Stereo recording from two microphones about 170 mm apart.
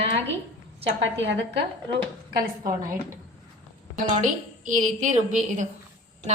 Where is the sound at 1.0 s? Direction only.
90° right.